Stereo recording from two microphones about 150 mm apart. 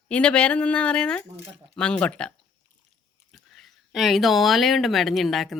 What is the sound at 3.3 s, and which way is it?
Speech, centre (ahead or behind).